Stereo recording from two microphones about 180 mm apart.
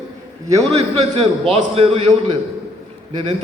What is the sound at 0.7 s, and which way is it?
A man's voice, 35° right (ahead or behind).